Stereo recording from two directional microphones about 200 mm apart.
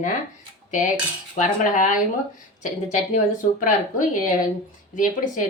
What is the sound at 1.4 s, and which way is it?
A woman's voice, 40° left (ahead or behind).